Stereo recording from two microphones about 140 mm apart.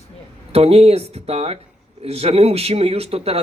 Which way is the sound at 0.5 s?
45° right (ahead or behind).